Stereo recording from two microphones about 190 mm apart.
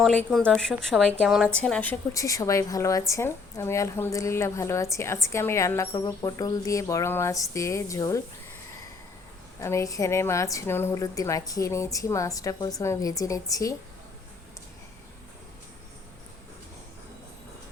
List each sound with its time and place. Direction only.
0.0 s a woman's voice: centre (ahead or behind)
9.6 s a woman's voice: 15° left (ahead or behind)